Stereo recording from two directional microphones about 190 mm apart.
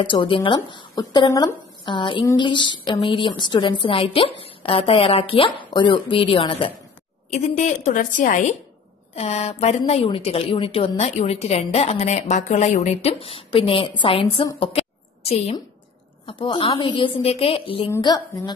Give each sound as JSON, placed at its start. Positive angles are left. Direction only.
{"t": 0.0, "sound": "a woman's voice", "side_deg": 25}